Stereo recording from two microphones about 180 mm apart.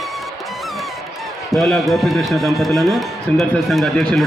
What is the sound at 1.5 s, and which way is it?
Speech, centre (ahead or behind).